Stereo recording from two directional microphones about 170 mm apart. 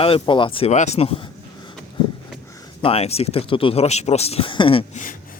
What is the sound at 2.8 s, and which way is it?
Speech, 35° left (ahead or behind).